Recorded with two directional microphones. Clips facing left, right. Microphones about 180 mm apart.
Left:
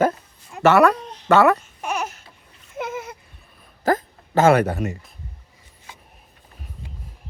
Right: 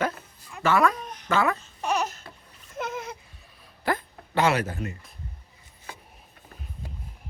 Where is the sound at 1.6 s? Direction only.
10° left (ahead or behind).